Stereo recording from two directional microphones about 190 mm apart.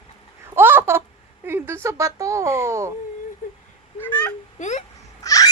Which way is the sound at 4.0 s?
10° left (ahead or behind).